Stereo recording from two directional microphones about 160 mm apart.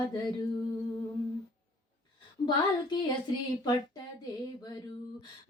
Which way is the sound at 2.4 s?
25° left (ahead or behind).